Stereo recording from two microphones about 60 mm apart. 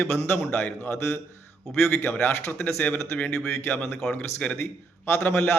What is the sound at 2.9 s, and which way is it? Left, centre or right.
Speech, left.